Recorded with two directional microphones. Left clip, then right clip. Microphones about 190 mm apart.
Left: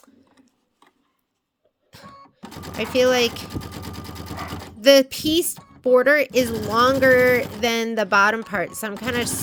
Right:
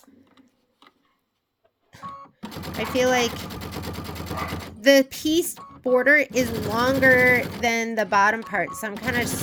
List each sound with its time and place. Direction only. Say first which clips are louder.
2.7 s speech: left 3 dB; 25° left (ahead or behind)
4.8 s speech: left 3 dB; 25° left (ahead or behind)